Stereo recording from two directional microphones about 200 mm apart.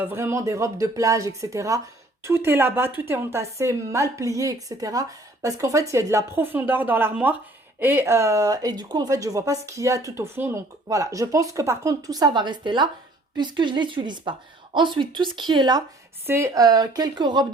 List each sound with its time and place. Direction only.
0.0 s a woman's voice: 10° right (ahead or behind)